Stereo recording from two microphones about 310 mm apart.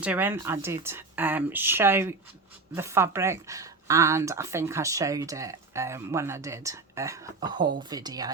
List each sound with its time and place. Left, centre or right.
0.0 s speech: centre